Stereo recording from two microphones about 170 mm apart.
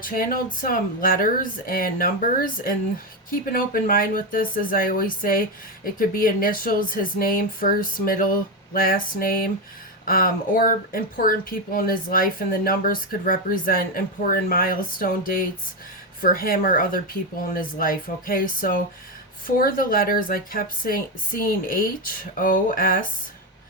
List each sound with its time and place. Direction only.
0.0 s speech: 55° left (ahead or behind)
3.2 s speech: 55° left (ahead or behind)